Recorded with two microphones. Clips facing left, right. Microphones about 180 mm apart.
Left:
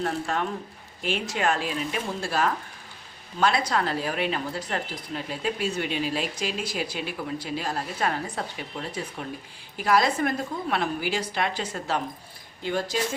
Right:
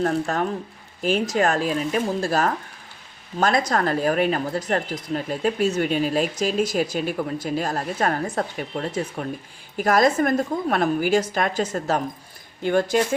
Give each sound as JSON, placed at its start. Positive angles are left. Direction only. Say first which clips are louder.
{"t": 0.0, "sound": "speech", "louder": "right 5 dB", "side_deg": -40}